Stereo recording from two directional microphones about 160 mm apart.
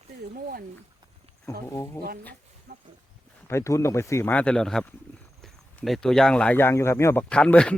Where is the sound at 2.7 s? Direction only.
55° right (ahead or behind).